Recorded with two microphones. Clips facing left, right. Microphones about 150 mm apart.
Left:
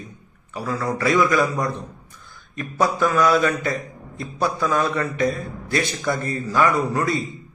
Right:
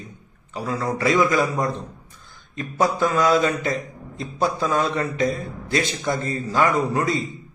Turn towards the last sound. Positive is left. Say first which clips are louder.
# even
turn(degrees=-20)  # may be behind; listen again after turning